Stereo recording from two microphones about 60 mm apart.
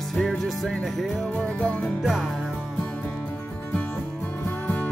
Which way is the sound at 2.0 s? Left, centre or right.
Centre.